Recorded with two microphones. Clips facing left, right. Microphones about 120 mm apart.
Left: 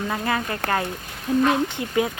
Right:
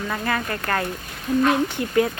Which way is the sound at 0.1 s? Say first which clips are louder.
Right 2 dB; 15° left (ahead or behind).